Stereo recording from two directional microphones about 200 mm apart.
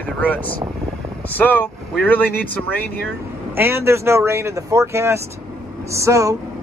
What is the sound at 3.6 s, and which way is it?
Speech, 10° right (ahead or behind).